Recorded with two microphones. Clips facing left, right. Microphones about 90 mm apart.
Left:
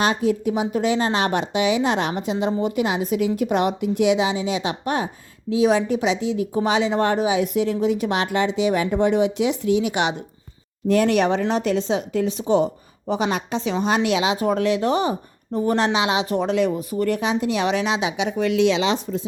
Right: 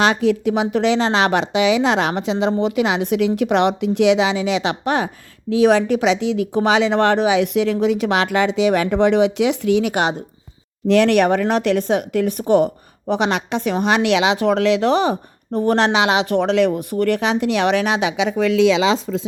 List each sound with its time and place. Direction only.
0.0 s a woman's voice: 90° right
5.5 s speech: 65° right (ahead or behind)
9.9 s speech: 40° right (ahead or behind)
10.8 s speech: 80° right